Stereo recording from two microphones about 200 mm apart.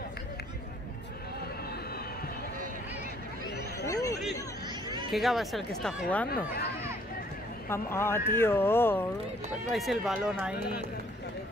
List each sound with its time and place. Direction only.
3.8 s hubbub: 15° left (ahead or behind)
5.1 s speech: centre (ahead or behind)
6.3 s speech: 50° left (ahead or behind)
7.7 s speech: 10° left (ahead or behind)
9.7 s speech: centre (ahead or behind)